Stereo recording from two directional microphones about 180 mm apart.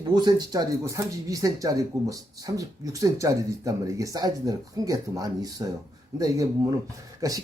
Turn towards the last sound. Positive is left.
turn(degrees=-20)  # may be behind; listen again after turning